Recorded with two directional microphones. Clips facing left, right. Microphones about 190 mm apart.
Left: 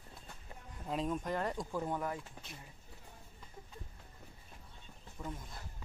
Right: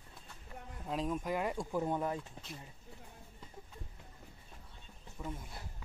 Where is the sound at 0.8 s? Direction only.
Centre (ahead or behind); by 2.1 s 20° right (ahead or behind).